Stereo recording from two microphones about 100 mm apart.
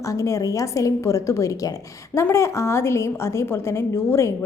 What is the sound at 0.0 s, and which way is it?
A woman's voice, 30° left (ahead or behind).